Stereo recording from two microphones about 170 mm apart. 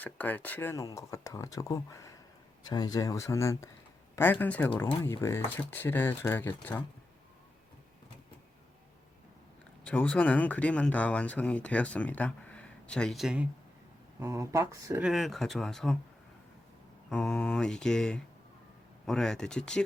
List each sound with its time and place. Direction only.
0.0 s speech: 10° left (ahead or behind)
9.8 s speech: 10° left (ahead or behind); by 13.5 s 5° right (ahead or behind)
14.2 s speech: 15° right (ahead or behind)
15.0 s mantra: centre (ahead or behind)
17.1 s mantra: 5° left (ahead or behind)